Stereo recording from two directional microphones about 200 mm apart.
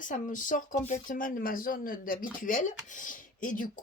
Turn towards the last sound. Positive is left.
turn(degrees=40)  # may be behind; listen again after turning